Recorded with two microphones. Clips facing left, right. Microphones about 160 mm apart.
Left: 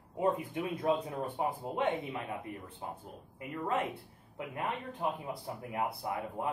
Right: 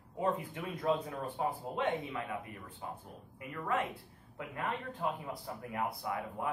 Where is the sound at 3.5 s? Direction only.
30° left (ahead or behind).